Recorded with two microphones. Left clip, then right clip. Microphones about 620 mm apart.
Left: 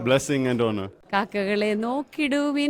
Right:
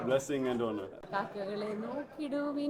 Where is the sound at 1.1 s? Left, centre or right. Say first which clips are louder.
Left 12 dB; left.